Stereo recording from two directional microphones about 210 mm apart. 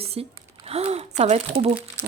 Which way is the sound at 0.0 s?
30° right (ahead or behind).